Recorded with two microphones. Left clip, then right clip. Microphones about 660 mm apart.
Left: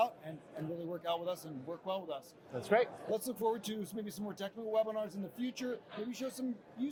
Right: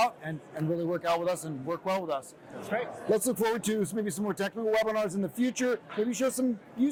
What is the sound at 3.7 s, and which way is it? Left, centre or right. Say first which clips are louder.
Speech: right 12 dB; right.